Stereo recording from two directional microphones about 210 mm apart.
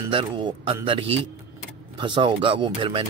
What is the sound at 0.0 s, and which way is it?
A man's voice, 25° right (ahead or behind).